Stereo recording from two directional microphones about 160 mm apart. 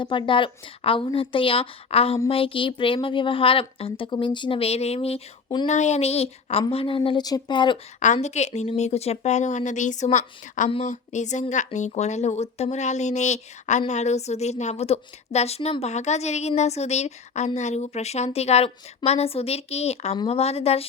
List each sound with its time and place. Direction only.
0.0 s a woman's voice: 30° left (ahead or behind)
5.6 s a woman's voice: 45° left (ahead or behind); by 7.8 s 30° left (ahead or behind)
7.9 s a woman's voice: 50° left (ahead or behind)